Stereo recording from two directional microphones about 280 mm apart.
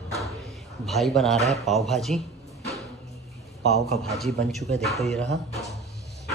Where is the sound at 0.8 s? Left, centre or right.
Centre.